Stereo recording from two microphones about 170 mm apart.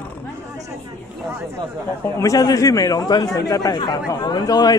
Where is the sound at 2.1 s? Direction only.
20° left (ahead or behind).